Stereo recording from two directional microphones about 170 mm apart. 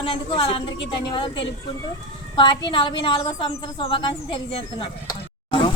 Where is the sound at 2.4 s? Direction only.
25° left (ahead or behind).